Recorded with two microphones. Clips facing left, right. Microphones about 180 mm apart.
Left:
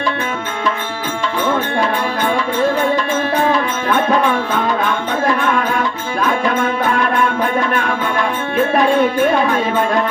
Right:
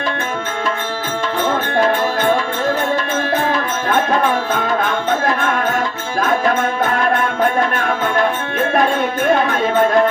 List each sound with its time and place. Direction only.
5.4 s music: 45° right (ahead or behind)